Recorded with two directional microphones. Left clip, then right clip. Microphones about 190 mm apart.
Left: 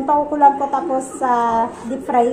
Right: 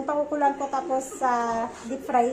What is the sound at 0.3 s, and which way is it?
A woman's voice, 5° right (ahead or behind).